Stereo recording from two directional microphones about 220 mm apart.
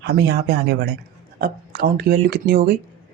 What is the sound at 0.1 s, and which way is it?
Speech, 45° right (ahead or behind).